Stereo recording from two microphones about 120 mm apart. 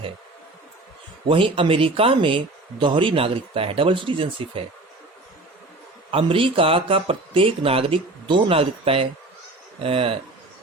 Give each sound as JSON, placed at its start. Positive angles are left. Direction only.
{"t": 1.3, "sound": "speech", "side_deg": -45}
{"t": 6.1, "sound": "speech", "side_deg": -50}